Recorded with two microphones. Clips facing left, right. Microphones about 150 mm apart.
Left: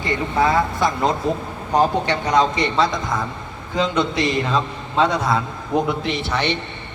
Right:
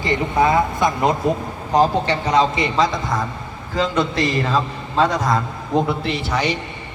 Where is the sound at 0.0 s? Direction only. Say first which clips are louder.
Right 2 dB; 20° right (ahead or behind).